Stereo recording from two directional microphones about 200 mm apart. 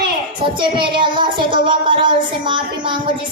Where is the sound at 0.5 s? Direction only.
25° right (ahead or behind).